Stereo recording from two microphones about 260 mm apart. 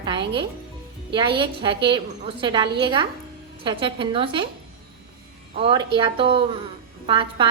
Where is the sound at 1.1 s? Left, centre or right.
Centre.